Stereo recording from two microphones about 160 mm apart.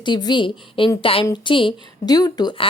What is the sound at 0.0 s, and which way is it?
A woman's voice, 25° left (ahead or behind).